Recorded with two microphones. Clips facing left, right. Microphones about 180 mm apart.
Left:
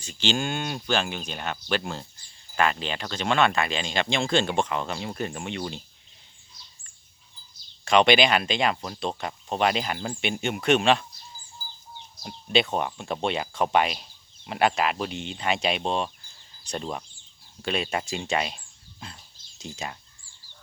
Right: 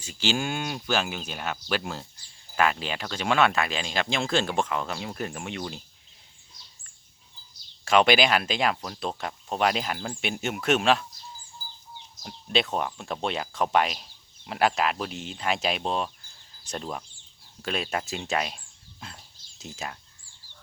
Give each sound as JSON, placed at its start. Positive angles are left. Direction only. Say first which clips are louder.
{"t": 0.0, "sound": "speech", "louder": "left 1 dB", "side_deg": -5}
{"t": 7.9, "sound": "speech", "louder": "left 1 dB", "side_deg": -5}
{"t": 12.2, "sound": "speech", "louder": "left 3 dB", "side_deg": 0}